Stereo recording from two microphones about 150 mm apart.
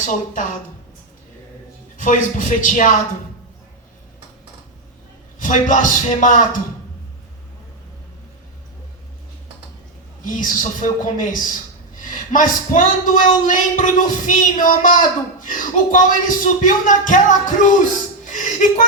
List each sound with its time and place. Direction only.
2.0 s speech: 55° left (ahead or behind)
5.4 s speech: 55° left (ahead or behind)
10.2 s speech: 60° left (ahead or behind)
18.3 s a sound: 55° left (ahead or behind)